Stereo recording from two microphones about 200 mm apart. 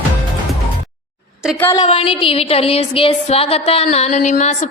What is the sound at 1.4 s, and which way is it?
Speech, 5° left (ahead or behind).